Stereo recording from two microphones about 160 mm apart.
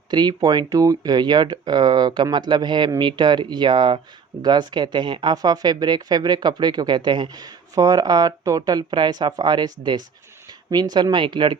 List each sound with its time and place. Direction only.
0.1 s speech: 25° right (ahead or behind)